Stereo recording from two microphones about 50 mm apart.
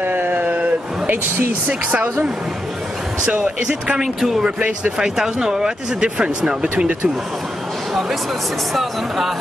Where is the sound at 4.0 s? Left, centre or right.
Centre.